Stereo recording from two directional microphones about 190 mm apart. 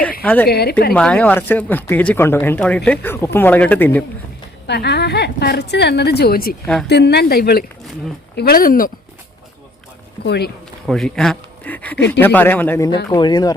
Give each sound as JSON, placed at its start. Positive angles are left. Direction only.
{"t": 0.2, "sound": "a woman's voice", "side_deg": 5}
{"t": 0.4, "sound": "a woman's voice", "side_deg": 55}
{"t": 0.9, "sound": "speech", "side_deg": 5}
{"t": 4.6, "sound": "a woman's voice", "side_deg": 60}
{"t": 10.2, "sound": "a woman's voice", "side_deg": 60}
{"t": 10.8, "sound": "speech", "side_deg": 0}
{"t": 11.9, "sound": "a woman's voice", "side_deg": 65}
{"t": 12.2, "sound": "speech", "side_deg": 10}
{"t": 13.1, "sound": "speech", "side_deg": 20}